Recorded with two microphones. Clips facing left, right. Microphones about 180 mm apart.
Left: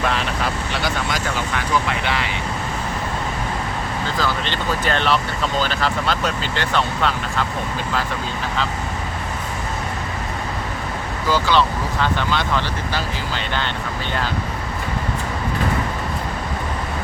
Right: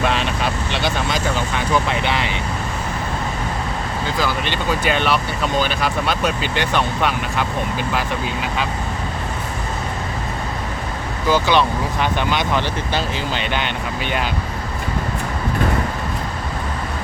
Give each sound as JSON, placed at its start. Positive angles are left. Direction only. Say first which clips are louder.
{"t": 0.1, "sound": "speech", "louder": "right 2 dB", "side_deg": -20}
{"t": 4.2, "sound": "speech", "louder": "right 2 dB", "side_deg": -10}
{"t": 11.3, "sound": "speech", "louder": "right 2 dB", "side_deg": -20}